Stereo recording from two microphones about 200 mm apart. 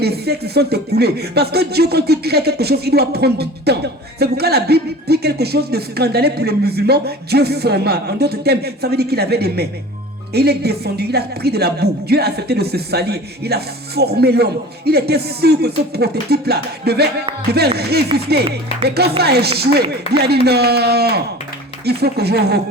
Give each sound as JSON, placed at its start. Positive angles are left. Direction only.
{"t": 0.0, "sound": "a woman's voice", "side_deg": -55}